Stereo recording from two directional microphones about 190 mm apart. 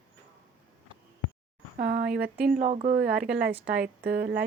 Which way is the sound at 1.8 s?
50° right (ahead or behind).